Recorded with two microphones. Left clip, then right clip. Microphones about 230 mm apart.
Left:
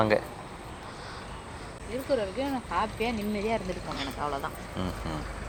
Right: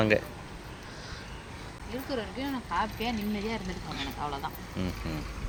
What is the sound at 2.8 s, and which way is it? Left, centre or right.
Speech, right.